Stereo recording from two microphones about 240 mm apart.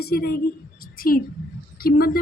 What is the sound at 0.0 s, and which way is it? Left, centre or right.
A woman's voice, left.